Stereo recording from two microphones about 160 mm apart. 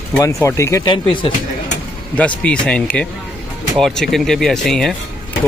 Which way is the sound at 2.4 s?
5° left (ahead or behind).